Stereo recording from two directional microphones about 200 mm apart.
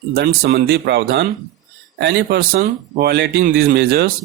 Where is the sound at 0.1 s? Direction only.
50° right (ahead or behind).